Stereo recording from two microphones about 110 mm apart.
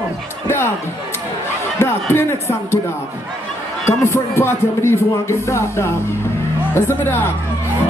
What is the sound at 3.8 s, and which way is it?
Speech, 25° left (ahead or behind).